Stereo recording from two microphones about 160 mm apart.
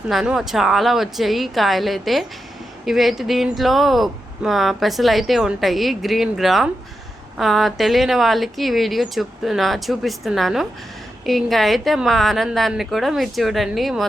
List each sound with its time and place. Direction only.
0.1 s speech: centre (ahead or behind)